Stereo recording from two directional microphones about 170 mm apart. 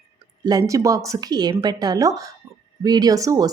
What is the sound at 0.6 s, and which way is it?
Speech, 20° right (ahead or behind).